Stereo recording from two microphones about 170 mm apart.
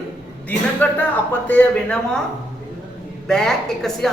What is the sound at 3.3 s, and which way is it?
Speech, 5° left (ahead or behind).